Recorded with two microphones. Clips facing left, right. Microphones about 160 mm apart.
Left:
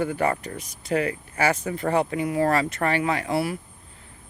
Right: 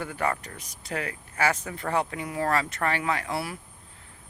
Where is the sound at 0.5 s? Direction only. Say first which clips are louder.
Left 9 dB; 15° left (ahead or behind).